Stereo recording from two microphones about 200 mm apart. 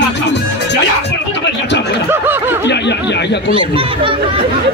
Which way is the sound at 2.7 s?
60° left (ahead or behind).